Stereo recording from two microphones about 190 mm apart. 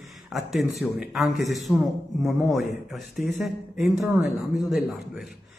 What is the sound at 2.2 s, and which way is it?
A man's voice, centre (ahead or behind).